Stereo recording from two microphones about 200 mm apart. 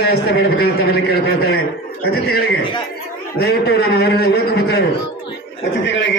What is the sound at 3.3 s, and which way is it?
Speech, 50° left (ahead or behind).